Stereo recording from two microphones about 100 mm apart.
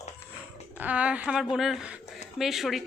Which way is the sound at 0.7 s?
15° right (ahead or behind).